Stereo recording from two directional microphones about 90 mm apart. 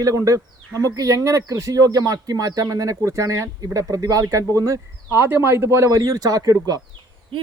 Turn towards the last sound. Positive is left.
turn(degrees=-45)  # may be behind; listen again after turning